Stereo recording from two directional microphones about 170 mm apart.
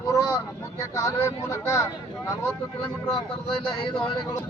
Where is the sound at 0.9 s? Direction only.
20° left (ahead or behind).